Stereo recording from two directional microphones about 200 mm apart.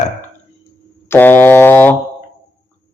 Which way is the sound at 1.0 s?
10° left (ahead or behind).